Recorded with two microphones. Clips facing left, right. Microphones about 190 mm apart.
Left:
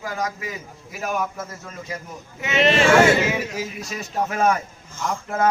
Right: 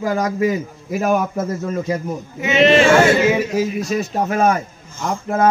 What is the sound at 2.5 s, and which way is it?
Speech, 90° right.